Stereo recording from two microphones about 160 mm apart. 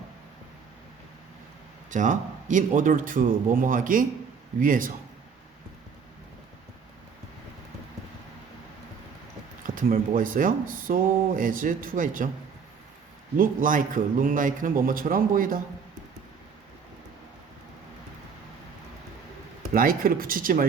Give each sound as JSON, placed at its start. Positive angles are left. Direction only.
{"t": 1.9, "sound": "speech", "side_deg": -50}
{"t": 9.6, "sound": "speech", "side_deg": -55}
{"t": 13.3, "sound": "speech", "side_deg": -55}
{"t": 19.7, "sound": "speech", "side_deg": -65}